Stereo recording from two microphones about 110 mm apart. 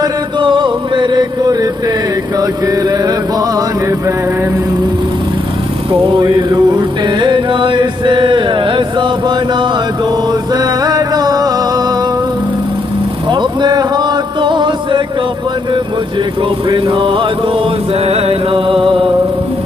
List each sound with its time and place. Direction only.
0.0 s chant: 45° right (ahead or behind)
2.4 s mantra: 30° right (ahead or behind)
6.1 s mantra: 45° right (ahead or behind)
6.8 s chant: 45° right (ahead or behind)
10.5 s music: 35° right (ahead or behind)
13.3 s music: 45° right (ahead or behind)
16.6 s mantra: 50° right (ahead or behind)
18.0 s music: 60° right (ahead or behind)